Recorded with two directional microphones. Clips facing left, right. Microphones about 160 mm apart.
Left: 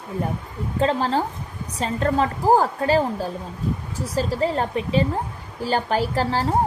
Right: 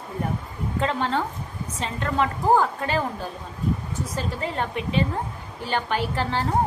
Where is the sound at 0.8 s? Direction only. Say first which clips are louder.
Left 4 dB; 35° left (ahead or behind).